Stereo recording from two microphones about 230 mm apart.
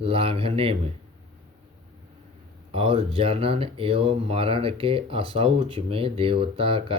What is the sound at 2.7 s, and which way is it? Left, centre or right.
Speech, right.